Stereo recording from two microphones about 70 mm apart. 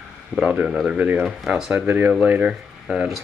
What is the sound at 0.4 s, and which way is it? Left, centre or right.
Speech, centre.